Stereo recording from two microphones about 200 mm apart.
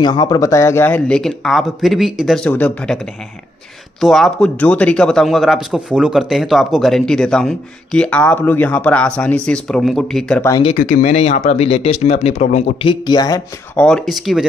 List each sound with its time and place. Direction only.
0.0 s speech: 20° left (ahead or behind)
4.0 s speech: centre (ahead or behind)
10.8 s speech: 40° left (ahead or behind)
12.8 s speech: 20° left (ahead or behind)
13.7 s speech: 5° left (ahead or behind)